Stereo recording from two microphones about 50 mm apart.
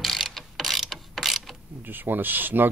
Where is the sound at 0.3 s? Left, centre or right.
Centre.